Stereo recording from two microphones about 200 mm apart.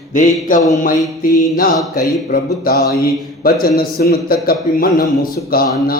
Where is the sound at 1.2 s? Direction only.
45° left (ahead or behind).